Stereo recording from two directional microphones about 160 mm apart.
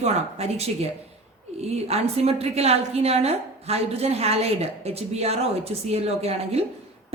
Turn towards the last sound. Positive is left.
turn(degrees=-40)  # may be behind; listen again after turning